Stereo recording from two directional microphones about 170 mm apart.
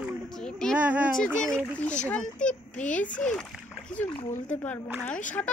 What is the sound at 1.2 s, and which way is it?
A child's voice, 5° left (ahead or behind).